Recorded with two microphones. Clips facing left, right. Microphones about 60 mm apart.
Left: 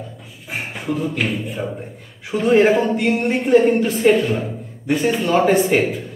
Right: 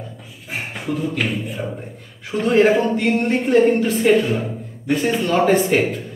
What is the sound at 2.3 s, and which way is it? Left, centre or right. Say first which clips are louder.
Speech: left 1 dB; centre.